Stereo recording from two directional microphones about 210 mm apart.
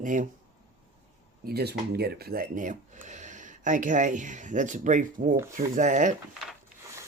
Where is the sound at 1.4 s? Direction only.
50° right (ahead or behind).